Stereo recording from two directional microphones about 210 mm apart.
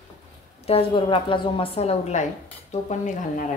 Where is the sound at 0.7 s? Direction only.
25° left (ahead or behind).